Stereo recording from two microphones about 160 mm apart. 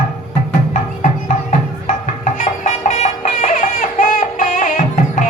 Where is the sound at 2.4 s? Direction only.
50° left (ahead or behind).